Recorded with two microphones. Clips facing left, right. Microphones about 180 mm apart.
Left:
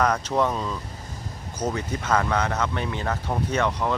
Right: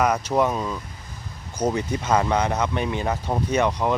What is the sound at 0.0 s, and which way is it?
Speech, 10° right (ahead or behind).